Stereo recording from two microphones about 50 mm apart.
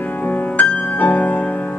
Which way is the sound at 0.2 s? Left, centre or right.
Left.